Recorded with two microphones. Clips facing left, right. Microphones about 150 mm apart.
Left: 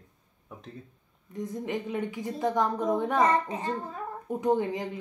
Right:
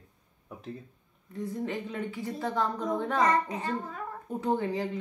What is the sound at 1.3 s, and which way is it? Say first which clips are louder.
A woman's voice: left 1 dB; 20° left (ahead or behind).